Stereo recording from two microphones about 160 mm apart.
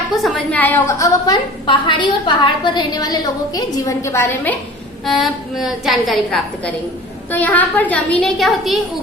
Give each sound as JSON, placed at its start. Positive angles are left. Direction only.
{"t": 0.2, "sound": "a woman's voice", "side_deg": 5}
{"t": 5.0, "sound": "a woman's voice", "side_deg": 0}